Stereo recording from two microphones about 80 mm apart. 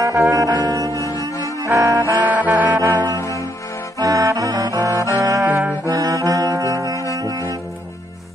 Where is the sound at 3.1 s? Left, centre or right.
Left.